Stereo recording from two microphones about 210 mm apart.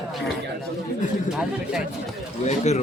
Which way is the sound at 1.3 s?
5° right (ahead or behind).